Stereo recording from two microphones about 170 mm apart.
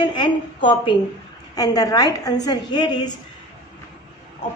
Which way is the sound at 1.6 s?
20° left (ahead or behind).